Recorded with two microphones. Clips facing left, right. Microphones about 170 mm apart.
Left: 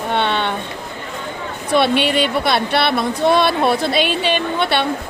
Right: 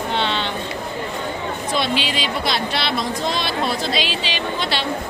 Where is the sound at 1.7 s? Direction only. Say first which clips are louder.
Left 8 dB; 60° left (ahead or behind).